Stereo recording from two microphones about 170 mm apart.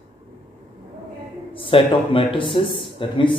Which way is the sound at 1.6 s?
30° left (ahead or behind).